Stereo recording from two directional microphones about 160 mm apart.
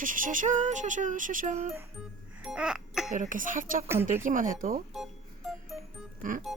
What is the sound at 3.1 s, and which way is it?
Speech, 55° right (ahead or behind).